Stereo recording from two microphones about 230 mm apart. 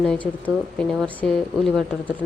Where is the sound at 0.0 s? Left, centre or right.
Centre.